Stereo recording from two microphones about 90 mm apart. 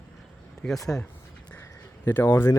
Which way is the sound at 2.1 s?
20° left (ahead or behind).